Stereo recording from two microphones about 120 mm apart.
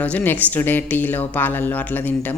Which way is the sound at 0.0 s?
15° left (ahead or behind).